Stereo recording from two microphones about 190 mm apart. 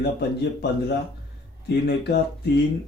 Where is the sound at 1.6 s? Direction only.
60° left (ahead or behind).